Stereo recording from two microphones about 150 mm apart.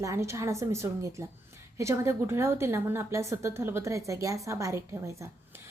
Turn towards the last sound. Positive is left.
turn(degrees=-20)  # may be behind; listen again after turning